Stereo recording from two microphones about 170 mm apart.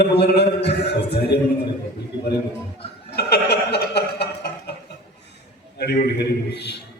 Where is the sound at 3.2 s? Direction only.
75° left (ahead or behind).